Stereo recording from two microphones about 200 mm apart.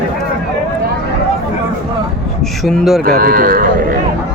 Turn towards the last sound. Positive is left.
turn(degrees=-45)  # may be behind; listen again after turning